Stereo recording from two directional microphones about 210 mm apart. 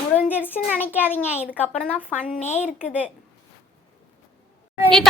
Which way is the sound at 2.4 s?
30° left (ahead or behind).